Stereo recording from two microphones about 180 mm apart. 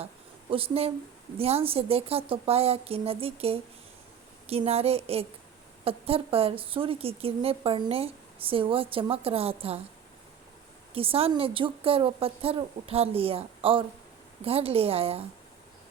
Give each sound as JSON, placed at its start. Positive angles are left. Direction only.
{"t": 0.5, "sound": "a woman's voice", "side_deg": -30}
{"t": 10.9, "sound": "a woman's voice", "side_deg": -30}